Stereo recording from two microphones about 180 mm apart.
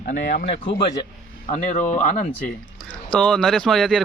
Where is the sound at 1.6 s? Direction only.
45° left (ahead or behind).